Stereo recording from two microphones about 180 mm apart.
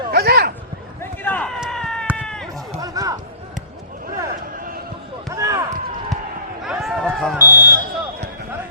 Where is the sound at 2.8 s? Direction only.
20° right (ahead or behind).